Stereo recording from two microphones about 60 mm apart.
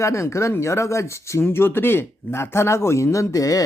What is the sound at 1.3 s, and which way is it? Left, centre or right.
Speech, left.